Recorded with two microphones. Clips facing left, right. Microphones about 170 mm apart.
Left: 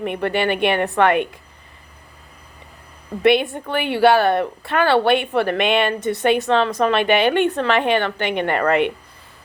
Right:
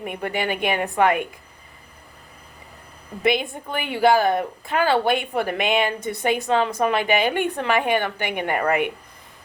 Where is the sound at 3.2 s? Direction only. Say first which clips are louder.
Left 6 dB; 70° left (ahead or behind).